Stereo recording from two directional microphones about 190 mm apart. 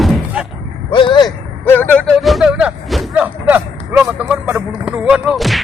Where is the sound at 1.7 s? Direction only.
10° left (ahead or behind).